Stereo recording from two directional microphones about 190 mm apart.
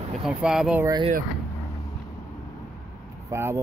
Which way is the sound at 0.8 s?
25° right (ahead or behind).